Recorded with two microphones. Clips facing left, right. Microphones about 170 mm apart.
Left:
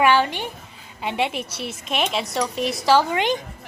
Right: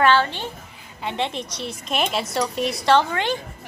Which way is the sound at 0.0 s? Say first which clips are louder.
Even; 15° left (ahead or behind).